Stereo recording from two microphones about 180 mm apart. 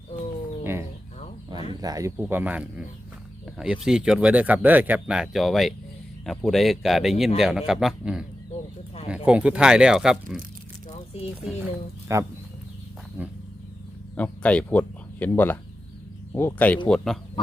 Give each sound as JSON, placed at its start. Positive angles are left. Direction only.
{"t": 0.6, "sound": "bird", "side_deg": -15}
{"t": 1.8, "sound": "speech", "side_deg": -20}
{"t": 12.1, "sound": "speech", "side_deg": -15}
{"t": 13.2, "sound": "wild animals", "side_deg": -10}
{"t": 14.2, "sound": "speech", "side_deg": 5}